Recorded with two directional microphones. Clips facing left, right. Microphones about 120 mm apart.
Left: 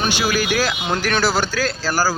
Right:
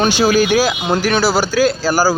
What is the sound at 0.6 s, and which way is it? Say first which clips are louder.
Speech: right 5 dB; 5° right (ahead or behind).